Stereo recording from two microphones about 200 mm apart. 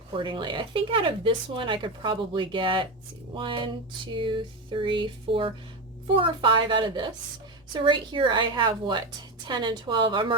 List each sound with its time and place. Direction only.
0.2 s speech: 25° right (ahead or behind)